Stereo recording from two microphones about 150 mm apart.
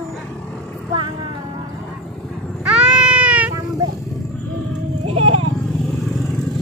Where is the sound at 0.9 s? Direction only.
30° right (ahead or behind).